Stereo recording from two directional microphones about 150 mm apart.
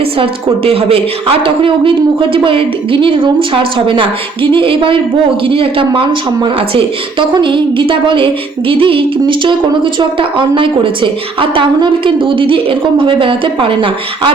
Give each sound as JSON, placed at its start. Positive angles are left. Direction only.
{"t": 0.6, "sound": "speech", "side_deg": -40}